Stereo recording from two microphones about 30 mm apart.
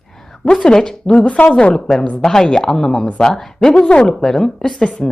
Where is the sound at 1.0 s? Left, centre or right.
Left.